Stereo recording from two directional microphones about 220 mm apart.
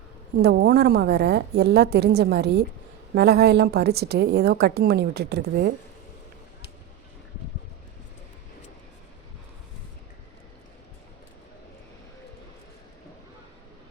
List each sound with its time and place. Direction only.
0.4 s a woman's voice: 45° right (ahead or behind)